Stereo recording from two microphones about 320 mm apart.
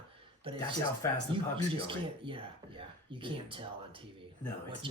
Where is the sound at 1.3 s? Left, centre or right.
Centre.